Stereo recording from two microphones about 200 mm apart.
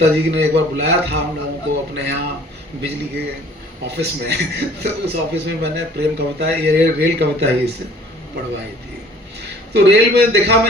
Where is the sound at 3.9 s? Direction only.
55° right (ahead or behind).